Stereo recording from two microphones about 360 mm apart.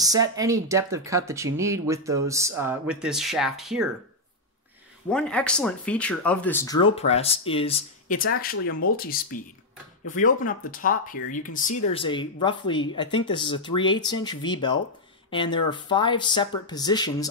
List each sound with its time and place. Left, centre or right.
0.0 s speech: centre
5.1 s speech: centre